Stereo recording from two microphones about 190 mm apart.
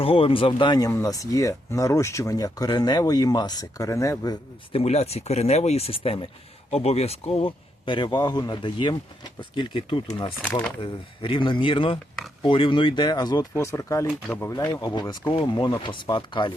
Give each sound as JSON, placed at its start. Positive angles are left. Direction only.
{"t": 0.0, "sound": "speech", "side_deg": 30}